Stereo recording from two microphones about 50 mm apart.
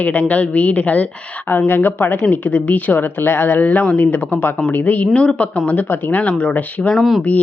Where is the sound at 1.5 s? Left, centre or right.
Left.